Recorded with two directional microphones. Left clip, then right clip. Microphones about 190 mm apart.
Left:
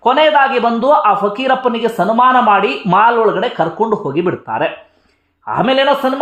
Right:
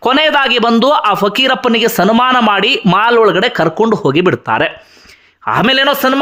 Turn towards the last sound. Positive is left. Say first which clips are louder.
# right 2 dB
turn(degrees=-25)  # may be behind; listen again after turning